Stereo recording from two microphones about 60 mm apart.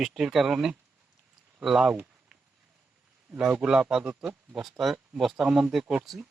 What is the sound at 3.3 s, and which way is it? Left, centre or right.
Speech, centre.